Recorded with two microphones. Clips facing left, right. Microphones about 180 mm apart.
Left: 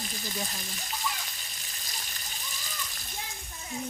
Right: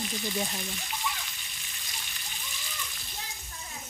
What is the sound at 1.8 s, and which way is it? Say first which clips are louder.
Water: left 1 dB; 40° left (ahead or behind).